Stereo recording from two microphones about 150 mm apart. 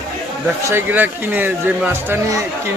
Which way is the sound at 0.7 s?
15° right (ahead or behind).